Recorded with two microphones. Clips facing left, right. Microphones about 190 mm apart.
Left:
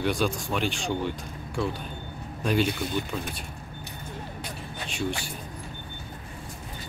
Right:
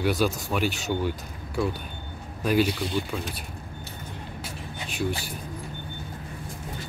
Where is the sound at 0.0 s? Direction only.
5° right (ahead or behind).